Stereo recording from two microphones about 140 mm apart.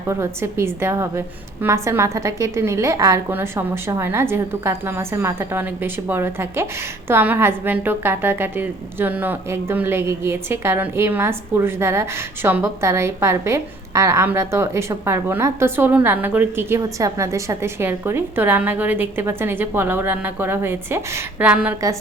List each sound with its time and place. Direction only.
0.1 s a woman's voice: 20° right (ahead or behind)